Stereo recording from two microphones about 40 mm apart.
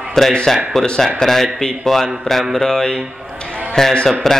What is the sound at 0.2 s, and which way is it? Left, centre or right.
Speech, centre.